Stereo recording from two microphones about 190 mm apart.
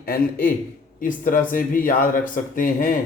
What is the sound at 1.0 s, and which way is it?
Speech, 45° left (ahead or behind).